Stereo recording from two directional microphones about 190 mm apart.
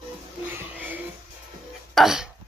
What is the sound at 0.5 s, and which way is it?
Music, 10° right (ahead or behind).